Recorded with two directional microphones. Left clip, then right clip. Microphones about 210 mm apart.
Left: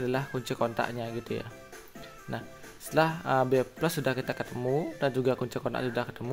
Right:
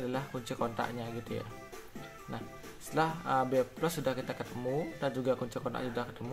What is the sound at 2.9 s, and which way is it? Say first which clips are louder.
Speech: left 5 dB; 40° left (ahead or behind).